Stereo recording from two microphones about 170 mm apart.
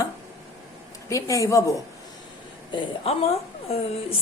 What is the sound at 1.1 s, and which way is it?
Speech, 20° left (ahead or behind).